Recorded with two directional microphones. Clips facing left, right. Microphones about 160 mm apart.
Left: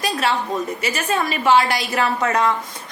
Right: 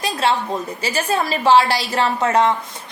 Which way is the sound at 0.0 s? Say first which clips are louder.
Right 1 dB; 25° right (ahead or behind).